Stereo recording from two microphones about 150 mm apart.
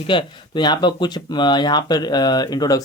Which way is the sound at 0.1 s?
30° left (ahead or behind).